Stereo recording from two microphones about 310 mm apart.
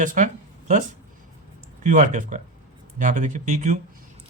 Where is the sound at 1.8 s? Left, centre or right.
Right.